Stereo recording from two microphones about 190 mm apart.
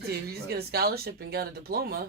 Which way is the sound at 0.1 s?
55° right (ahead or behind).